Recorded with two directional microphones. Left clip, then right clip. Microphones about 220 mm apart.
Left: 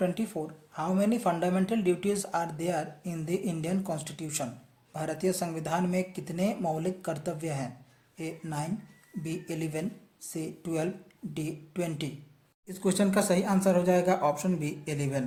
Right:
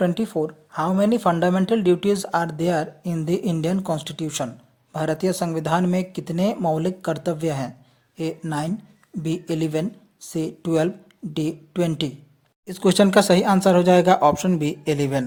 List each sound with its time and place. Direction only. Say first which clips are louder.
0.0 s speech: right 9 dB; 35° right (ahead or behind)